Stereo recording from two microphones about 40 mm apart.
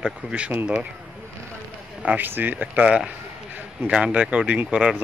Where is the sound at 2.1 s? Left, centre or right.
Right.